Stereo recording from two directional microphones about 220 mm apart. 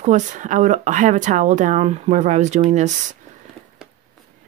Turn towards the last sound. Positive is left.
turn(degrees=-35)  # may be behind; listen again after turning